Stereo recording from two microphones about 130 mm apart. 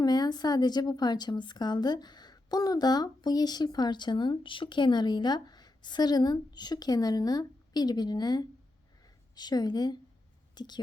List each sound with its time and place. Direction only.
0.0 s a woman's voice: 30° left (ahead or behind)